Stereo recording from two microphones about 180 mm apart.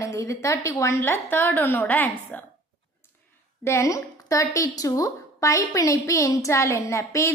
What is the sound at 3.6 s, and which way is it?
A woman's voice, 15° left (ahead or behind).